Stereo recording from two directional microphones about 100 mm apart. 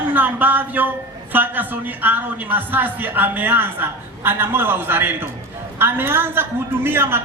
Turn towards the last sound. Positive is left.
turn(degrees=-20)  # may be behind; listen again after turning